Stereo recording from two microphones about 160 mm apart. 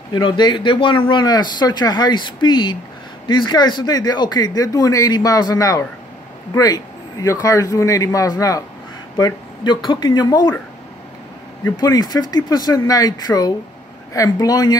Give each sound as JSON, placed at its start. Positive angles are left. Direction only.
{"t": 0.1, "sound": "speech", "side_deg": 30}
{"t": 11.6, "sound": "speech", "side_deg": 25}